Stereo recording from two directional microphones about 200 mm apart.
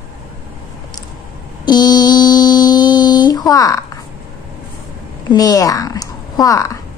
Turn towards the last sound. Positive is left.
turn(degrees=15)  # may be behind; listen again after turning